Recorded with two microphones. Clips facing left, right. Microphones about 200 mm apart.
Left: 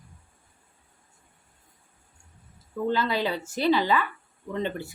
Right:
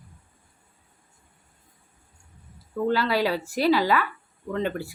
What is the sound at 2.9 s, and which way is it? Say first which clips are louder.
A woman's voice: right 3 dB; 20° left (ahead or behind).